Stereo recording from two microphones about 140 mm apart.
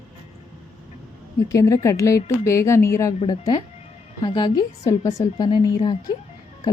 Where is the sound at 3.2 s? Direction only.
30° left (ahead or behind).